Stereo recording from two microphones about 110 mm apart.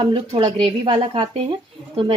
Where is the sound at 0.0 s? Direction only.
50° right (ahead or behind).